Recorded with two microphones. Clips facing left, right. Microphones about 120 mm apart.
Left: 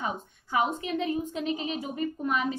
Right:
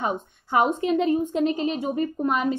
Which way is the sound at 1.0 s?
40° right (ahead or behind).